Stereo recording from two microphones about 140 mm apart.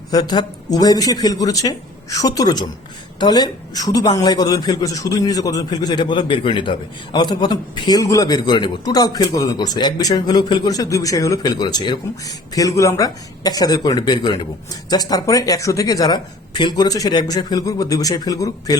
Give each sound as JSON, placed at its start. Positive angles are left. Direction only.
{"t": 0.1, "sound": "a man's voice", "side_deg": 30}